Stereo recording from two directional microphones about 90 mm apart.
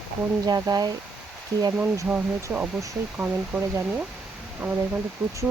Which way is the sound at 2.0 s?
20° right (ahead or behind).